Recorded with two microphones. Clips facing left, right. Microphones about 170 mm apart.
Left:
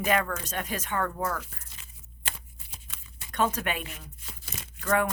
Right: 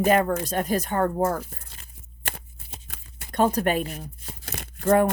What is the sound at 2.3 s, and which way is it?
Shuffling cards, 60° right (ahead or behind).